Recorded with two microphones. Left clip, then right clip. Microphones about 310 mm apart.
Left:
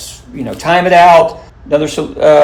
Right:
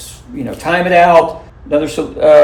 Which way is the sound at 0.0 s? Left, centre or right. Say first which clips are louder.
Left 1 dB; left.